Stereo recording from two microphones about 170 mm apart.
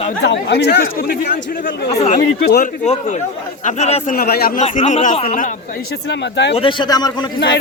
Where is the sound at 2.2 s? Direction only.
70° left (ahead or behind).